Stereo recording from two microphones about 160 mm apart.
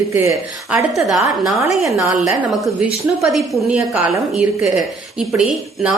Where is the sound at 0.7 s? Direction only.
5° right (ahead or behind).